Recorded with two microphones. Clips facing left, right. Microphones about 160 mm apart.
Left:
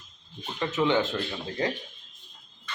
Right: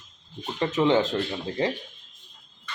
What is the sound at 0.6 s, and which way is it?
Speech, 30° right (ahead or behind).